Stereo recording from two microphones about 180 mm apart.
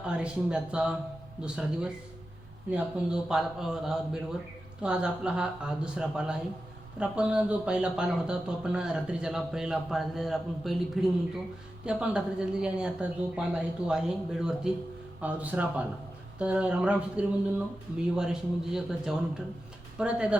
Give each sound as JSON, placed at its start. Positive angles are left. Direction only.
{"t": 0.1, "sound": "speech", "side_deg": -5}